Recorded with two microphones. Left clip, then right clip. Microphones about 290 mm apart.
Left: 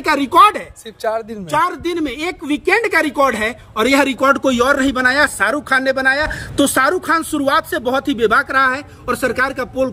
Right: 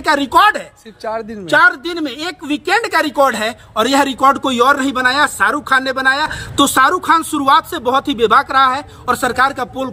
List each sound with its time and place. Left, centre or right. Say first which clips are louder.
0.0 s speech: right 2 dB; centre
1.0 s speech: left 2 dB; left
1.6 s speech: right 5 dB; centre
5.1 s speech: right 1 dB; left
6.5 s speech: right 3 dB; centre